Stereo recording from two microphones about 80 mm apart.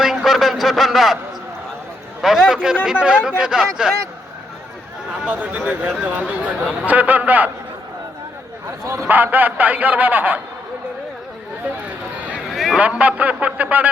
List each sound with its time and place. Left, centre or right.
0.0 s a sound: centre
2.2 s a man's voice: centre
5.2 s a man's voice: centre
8.8 s a man's voice: right
9.0 s a man's voice: right
12.5 s a sound: centre
12.8 s a man's voice: centre